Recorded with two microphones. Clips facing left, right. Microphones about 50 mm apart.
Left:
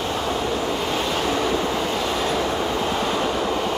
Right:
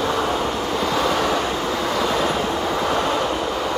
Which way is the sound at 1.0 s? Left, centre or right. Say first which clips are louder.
Right 4 dB; right.